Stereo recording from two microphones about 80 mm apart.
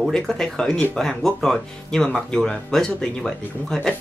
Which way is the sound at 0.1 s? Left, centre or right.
Centre.